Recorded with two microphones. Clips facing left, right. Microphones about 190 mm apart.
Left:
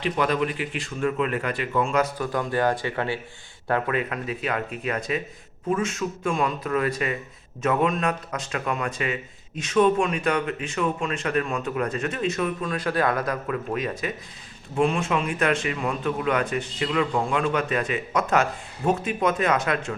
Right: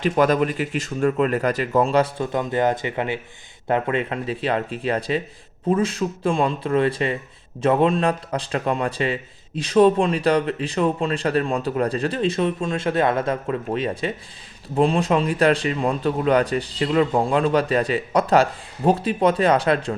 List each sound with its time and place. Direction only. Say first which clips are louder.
0.0 s a man's voice: right 5 dB; 45° right (ahead or behind)